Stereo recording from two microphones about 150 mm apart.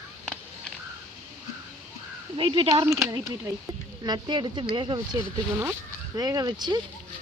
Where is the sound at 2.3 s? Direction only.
35° right (ahead or behind).